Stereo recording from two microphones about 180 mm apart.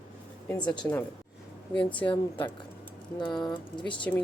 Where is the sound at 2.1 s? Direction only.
25° left (ahead or behind).